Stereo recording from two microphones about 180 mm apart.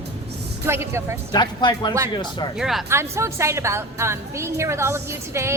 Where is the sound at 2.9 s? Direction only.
15° right (ahead or behind).